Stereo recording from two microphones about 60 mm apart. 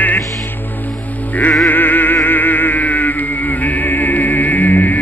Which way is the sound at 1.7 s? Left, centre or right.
Left.